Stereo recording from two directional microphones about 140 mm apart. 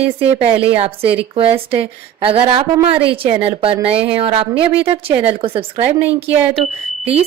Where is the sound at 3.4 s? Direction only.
40° right (ahead or behind).